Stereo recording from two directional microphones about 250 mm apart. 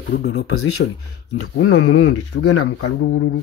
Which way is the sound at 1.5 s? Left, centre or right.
Left.